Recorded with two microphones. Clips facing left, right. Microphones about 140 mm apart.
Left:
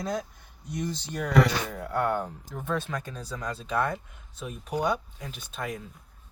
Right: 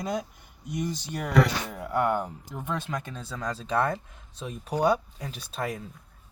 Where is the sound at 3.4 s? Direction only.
30° right (ahead or behind).